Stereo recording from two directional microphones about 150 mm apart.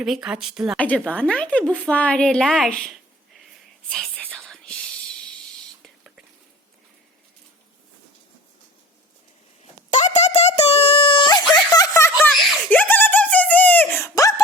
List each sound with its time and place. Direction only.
0.0 s speech: 5° right (ahead or behind)
0.8 s a woman's voice: 10° left (ahead or behind)
3.8 s whispering: 5° left (ahead or behind)
9.9 s a sound: 50° left (ahead or behind); by 14.4 s 20° left (ahead or behind)